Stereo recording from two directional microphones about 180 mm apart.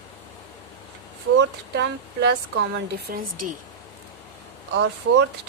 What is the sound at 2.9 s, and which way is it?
Speech, 55° right (ahead or behind).